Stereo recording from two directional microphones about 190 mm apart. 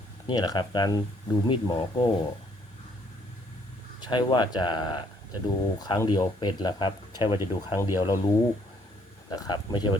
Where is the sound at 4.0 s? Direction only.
25° left (ahead or behind).